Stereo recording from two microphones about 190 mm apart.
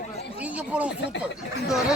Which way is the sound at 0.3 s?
5° right (ahead or behind).